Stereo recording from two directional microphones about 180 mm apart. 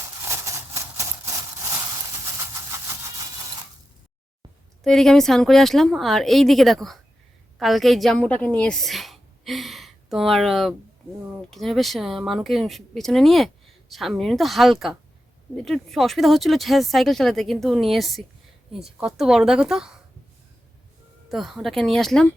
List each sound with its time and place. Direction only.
0.2 s a sound: 15° right (ahead or behind)
4.8 s a woman's voice: centre (ahead or behind)
21.2 s speech: centre (ahead or behind)